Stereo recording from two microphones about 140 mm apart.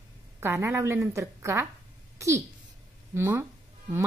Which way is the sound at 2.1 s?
20° right (ahead or behind).